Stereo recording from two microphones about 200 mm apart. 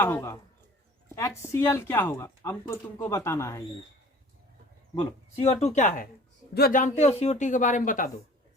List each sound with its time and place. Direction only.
0.0 s speech: 10° left (ahead or behind)
4.9 s speech: 30° left (ahead or behind)
6.5 s speech: 50° left (ahead or behind)